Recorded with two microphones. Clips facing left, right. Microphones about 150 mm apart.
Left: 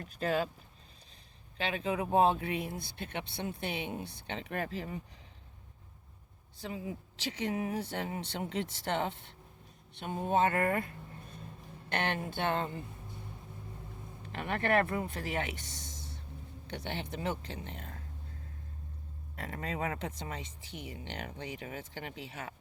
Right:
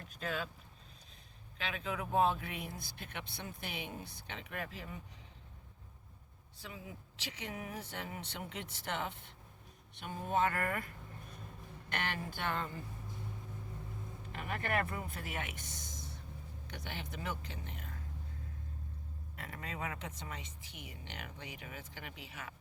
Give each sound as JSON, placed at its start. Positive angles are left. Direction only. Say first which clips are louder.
{"t": 0.0, "sound": "speech", "louder": "left 8 dB", "side_deg": 35}
{"t": 1.5, "sound": "a woman's voice", "louder": "left 7 dB", "side_deg": 30}
{"t": 6.6, "sound": "speech", "louder": "left 9 dB", "side_deg": 35}
{"t": 11.9, "sound": "a woman's voice", "louder": "left 6 dB", "side_deg": 30}
{"t": 14.3, "sound": "speech", "louder": "left 7 dB", "side_deg": 70}
{"t": 15.7, "sound": "whispering", "louder": "left 1 dB", "side_deg": 30}
{"t": 16.6, "sound": "speech", "louder": "left 7 dB", "side_deg": 30}
{"t": 19.4, "sound": "speech", "louder": "left 7 dB", "side_deg": 40}